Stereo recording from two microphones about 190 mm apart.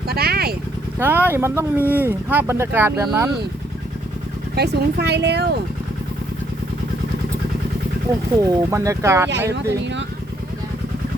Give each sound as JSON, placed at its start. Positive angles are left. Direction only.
{"t": 0.1, "sound": "speech", "side_deg": -55}
{"t": 0.9, "sound": "speech", "side_deg": -10}
{"t": 4.5, "sound": "speech", "side_deg": -60}
{"t": 8.4, "sound": "speech", "side_deg": -15}
{"t": 9.5, "sound": "speech", "side_deg": -65}